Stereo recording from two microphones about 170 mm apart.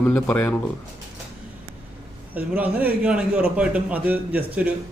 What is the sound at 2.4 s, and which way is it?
A man's voice, 10° right (ahead or behind).